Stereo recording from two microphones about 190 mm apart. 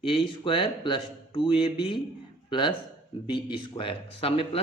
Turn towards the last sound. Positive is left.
turn(degrees=30)  # may be behind; listen again after turning